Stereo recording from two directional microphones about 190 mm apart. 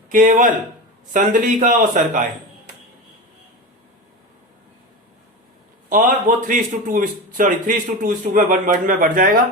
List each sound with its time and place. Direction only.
0.1 s a man's voice: 45° right (ahead or behind)
5.9 s a man's voice: 45° right (ahead or behind)